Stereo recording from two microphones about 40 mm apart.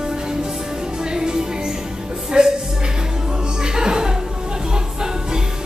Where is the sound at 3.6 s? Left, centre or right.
Centre.